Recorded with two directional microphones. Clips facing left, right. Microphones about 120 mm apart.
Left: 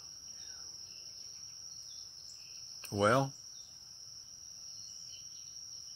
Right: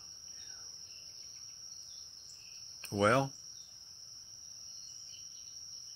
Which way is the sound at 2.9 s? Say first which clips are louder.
Even; 15° left (ahead or behind).